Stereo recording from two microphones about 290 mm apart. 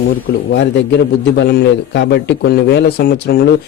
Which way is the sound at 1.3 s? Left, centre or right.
Left.